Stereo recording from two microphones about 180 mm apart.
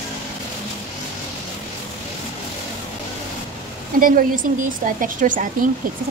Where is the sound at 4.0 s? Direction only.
50° right (ahead or behind).